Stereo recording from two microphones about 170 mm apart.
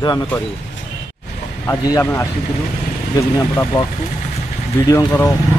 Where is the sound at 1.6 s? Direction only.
20° left (ahead or behind).